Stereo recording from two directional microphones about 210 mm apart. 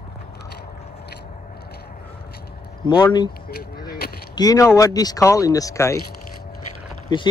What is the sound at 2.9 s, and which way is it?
Speech, 20° left (ahead or behind).